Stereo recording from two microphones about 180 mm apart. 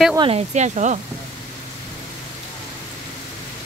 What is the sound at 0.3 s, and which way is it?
Speech, 40° right (ahead or behind).